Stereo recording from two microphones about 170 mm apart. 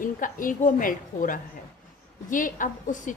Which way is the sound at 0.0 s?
55° left (ahead or behind).